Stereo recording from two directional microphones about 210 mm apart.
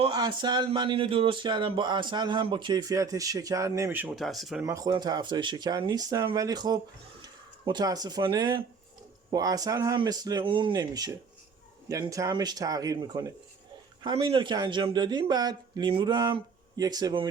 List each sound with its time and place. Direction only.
0.0 s speech: 20° right (ahead or behind); by 4.6 s centre (ahead or behind)
4.6 s speech: 15° right (ahead or behind)